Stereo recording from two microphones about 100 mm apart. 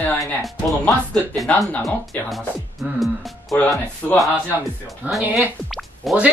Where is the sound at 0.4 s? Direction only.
Centre (ahead or behind).